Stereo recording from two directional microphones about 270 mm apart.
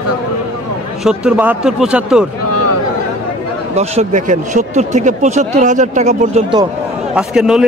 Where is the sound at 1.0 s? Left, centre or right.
Centre.